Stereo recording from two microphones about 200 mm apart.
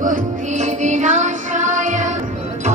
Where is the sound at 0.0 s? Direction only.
40° right (ahead or behind).